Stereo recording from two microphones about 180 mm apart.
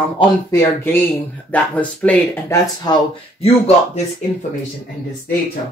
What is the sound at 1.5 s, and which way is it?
Speech, 5° left (ahead or behind).